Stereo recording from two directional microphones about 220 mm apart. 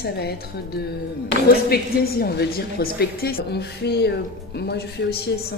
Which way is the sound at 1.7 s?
45° left (ahead or behind).